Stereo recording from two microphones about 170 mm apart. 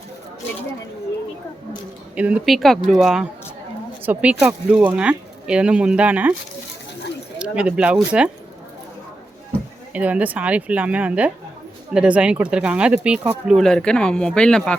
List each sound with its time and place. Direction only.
2.1 s speech: 10° right (ahead or behind)
7.3 s speech: 5° right (ahead or behind)
9.9 s speech: 10° right (ahead or behind)